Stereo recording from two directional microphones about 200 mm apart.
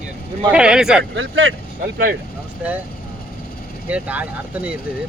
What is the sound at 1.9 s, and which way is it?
Speech, 50° right (ahead or behind).